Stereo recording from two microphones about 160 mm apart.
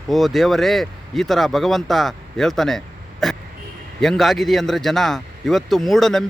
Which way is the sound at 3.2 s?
Centre (ahead or behind).